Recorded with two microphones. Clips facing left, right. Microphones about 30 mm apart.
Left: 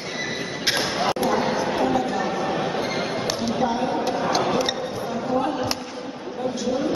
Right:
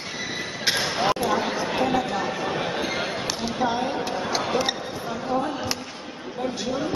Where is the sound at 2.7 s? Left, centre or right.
Centre.